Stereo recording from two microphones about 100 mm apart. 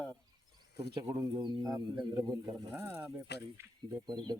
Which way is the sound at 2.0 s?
45° right (ahead or behind).